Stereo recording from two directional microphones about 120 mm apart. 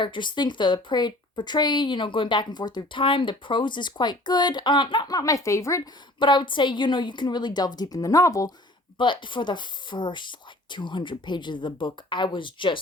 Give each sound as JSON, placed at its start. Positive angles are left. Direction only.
{"t": 0.0, "sound": "speech", "side_deg": 40}
{"t": 6.1, "sound": "speech", "side_deg": 40}
{"t": 9.0, "sound": "speech", "side_deg": 40}